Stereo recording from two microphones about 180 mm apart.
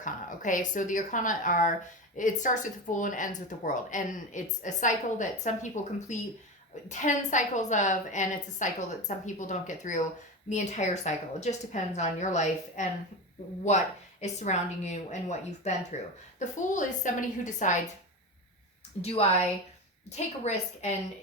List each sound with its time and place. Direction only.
0.0 s a woman's voice: 45° left (ahead or behind)
19.0 s a woman's voice: 35° left (ahead or behind)